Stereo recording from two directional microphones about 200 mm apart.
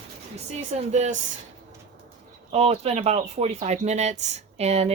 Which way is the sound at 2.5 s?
30° right (ahead or behind).